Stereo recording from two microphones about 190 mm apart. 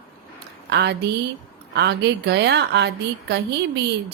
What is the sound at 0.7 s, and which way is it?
A woman's voice, 60° right (ahead or behind).